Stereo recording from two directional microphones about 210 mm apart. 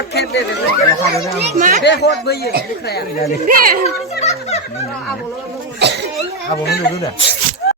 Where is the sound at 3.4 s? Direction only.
45° right (ahead or behind).